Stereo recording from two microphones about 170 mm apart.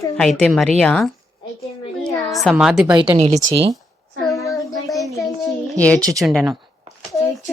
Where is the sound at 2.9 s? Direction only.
25° right (ahead or behind).